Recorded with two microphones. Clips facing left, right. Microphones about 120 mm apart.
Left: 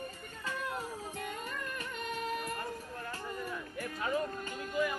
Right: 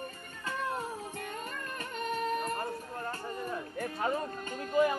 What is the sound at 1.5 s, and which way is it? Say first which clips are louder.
Music: right 1 dB; 40° right (ahead or behind).